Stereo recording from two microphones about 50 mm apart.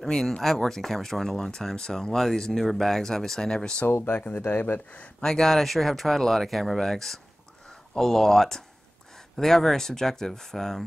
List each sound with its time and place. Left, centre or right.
0.0 s speech: centre
4.1 s speech: left
5.2 s speech: centre